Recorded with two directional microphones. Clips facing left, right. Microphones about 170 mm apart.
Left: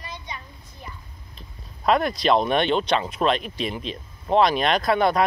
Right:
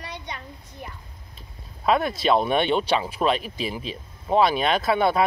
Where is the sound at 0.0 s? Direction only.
70° right (ahead or behind).